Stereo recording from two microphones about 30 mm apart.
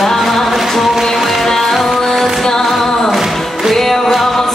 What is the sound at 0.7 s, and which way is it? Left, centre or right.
Music, centre.